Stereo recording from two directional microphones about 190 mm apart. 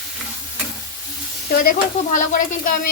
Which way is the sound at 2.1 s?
45° left (ahead or behind).